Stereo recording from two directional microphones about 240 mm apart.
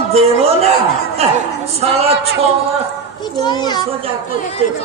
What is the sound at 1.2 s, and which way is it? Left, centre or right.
A woman's voice, right.